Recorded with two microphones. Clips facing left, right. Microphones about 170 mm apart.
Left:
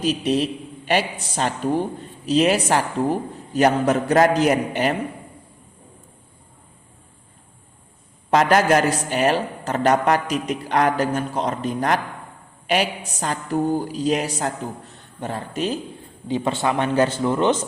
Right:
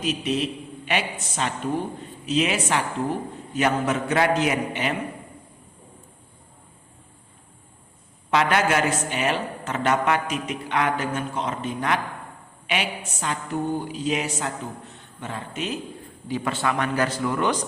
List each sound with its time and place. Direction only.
0.0 s speech: 35° left (ahead or behind)
8.3 s a woman's voice: 40° left (ahead or behind)
16.3 s a man's voice: 25° left (ahead or behind)